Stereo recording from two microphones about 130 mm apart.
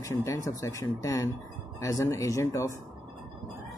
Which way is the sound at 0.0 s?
25° left (ahead or behind).